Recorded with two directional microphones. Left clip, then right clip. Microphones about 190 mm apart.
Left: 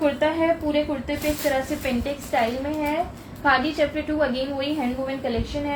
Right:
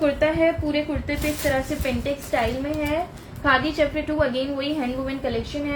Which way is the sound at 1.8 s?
35° right (ahead or behind).